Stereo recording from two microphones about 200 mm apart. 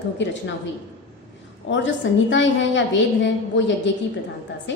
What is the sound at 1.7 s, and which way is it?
A woman's voice, 65° left (ahead or behind).